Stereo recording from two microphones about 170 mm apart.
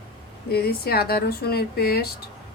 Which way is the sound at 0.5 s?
65° left (ahead or behind).